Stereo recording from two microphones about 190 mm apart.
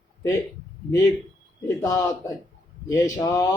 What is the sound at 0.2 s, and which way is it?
Speech, 15° left (ahead or behind).